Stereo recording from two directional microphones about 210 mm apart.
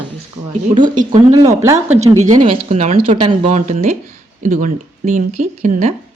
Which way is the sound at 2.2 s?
35° right (ahead or behind).